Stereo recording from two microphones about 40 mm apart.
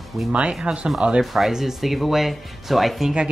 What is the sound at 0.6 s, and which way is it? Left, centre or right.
Speech, right.